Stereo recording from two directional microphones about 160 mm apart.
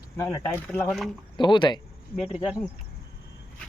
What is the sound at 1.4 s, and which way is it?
Speech, 30° left (ahead or behind).